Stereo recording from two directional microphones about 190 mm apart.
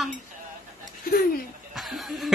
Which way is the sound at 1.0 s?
50° left (ahead or behind).